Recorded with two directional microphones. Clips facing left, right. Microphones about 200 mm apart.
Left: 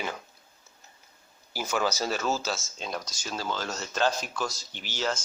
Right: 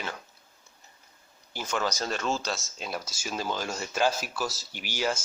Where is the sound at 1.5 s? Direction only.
5° left (ahead or behind).